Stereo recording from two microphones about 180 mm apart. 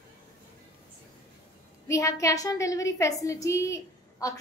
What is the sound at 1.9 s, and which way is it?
A woman's voice, 15° left (ahead or behind).